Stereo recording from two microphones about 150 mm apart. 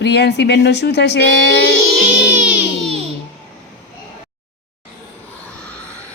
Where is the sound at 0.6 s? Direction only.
90° left.